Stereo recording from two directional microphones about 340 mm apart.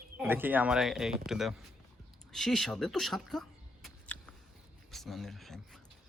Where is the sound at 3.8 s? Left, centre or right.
Centre.